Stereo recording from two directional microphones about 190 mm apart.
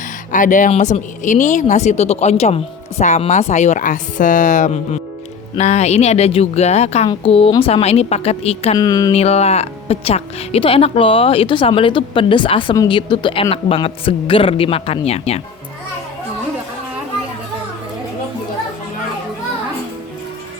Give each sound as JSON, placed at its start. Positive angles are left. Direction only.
{"t": 0.3, "sound": "speech", "side_deg": 45}
{"t": 8.8, "sound": "speech", "side_deg": 20}
{"t": 9.1, "sound": "speech", "side_deg": 35}